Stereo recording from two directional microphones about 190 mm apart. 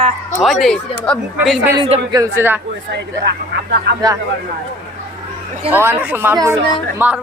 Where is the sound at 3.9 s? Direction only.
70° right (ahead or behind).